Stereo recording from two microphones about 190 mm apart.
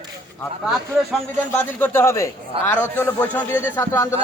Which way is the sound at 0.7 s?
5° left (ahead or behind).